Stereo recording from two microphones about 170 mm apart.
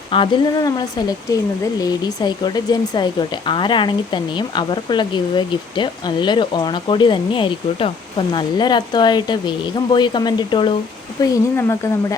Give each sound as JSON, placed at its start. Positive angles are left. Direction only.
{"t": 0.1, "sound": "speech", "side_deg": 25}